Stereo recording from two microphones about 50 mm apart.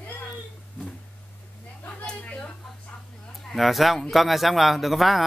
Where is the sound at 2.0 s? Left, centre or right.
Left.